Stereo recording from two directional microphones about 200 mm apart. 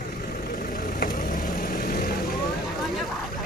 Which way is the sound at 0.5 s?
40° left (ahead or behind).